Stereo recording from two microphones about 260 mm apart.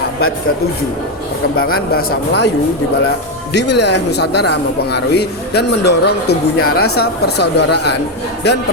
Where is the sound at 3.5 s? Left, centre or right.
Left.